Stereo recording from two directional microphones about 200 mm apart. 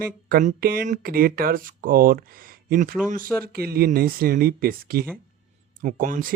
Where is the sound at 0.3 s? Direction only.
45° right (ahead or behind).